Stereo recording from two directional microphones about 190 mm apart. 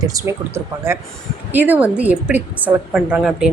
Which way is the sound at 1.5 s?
10° right (ahead or behind).